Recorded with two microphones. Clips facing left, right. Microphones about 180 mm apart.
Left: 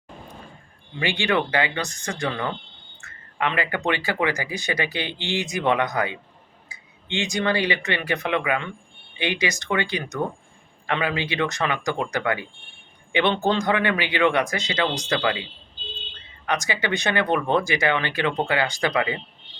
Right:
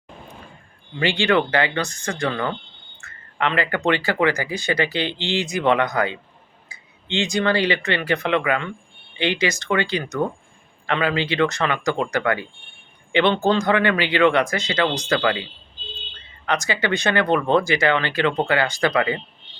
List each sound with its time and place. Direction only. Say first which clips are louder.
0.9 s speech: right 4 dB; 15° left (ahead or behind)
16.5 s speech: right 3 dB; 15° left (ahead or behind)